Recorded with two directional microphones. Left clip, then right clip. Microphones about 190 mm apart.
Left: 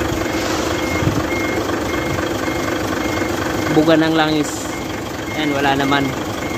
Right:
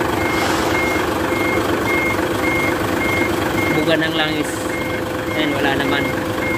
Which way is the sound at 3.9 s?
20° left (ahead or behind).